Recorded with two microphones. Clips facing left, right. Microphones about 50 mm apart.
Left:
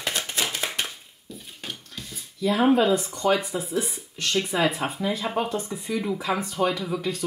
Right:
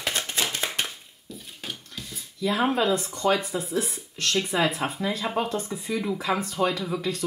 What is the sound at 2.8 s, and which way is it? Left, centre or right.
Speech, centre.